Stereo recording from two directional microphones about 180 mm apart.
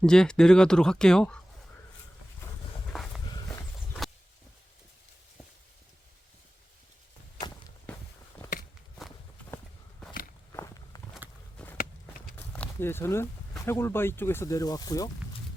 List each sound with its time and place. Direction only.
0.0 s speech: 5° left (ahead or behind)
2.9 s walk: centre (ahead or behind)
7.9 s a sound: 5° left (ahead or behind)
10.5 s walk: 15° left (ahead or behind)
12.4 s a sound: 10° left (ahead or behind)
13.6 s speech: 15° left (ahead or behind)